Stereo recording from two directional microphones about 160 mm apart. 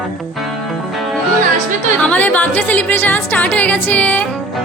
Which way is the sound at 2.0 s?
10° left (ahead or behind).